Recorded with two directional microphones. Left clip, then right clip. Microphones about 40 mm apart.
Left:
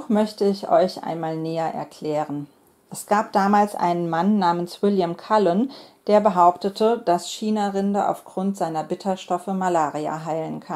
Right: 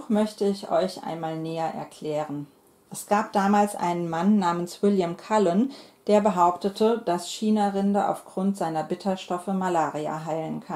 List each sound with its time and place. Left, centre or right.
0.1 s speech: left; by 5.7 s centre
6.0 s speech: left
7.1 s speech: left